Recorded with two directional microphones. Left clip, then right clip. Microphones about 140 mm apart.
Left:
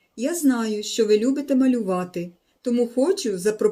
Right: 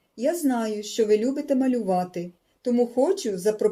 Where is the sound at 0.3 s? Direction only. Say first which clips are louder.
Left 1 dB; 55° left (ahead or behind).